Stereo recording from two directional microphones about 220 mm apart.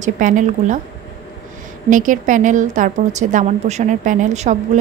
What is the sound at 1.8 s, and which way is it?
A woman's voice, 35° right (ahead or behind).